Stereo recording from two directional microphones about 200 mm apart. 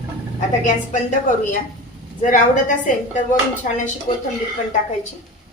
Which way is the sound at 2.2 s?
40° left (ahead or behind).